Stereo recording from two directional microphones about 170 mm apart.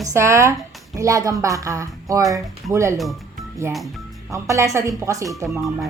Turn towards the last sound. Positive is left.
turn(degrees=-15)  # may be behind; listen again after turning